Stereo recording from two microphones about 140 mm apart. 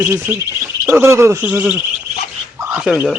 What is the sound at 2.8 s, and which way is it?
Speech, 5° right (ahead or behind).